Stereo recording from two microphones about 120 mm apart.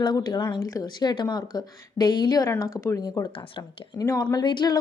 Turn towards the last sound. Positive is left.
turn(degrees=40)  # may be behind; listen again after turning